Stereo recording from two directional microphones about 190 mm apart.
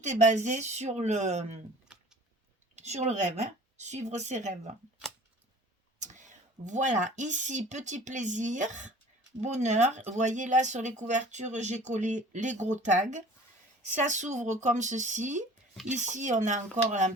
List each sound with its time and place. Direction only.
0.0 s speech: 40° right (ahead or behind)
1.9 s a sound: 5° right (ahead or behind)
2.7 s speech: 35° right (ahead or behind)
6.0 s whispering: 40° right (ahead or behind)
6.7 s speech: 40° right (ahead or behind)